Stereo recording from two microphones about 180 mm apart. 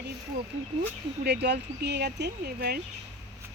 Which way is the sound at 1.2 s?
70° right (ahead or behind).